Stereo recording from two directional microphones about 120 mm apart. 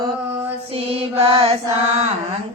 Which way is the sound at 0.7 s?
50° right (ahead or behind).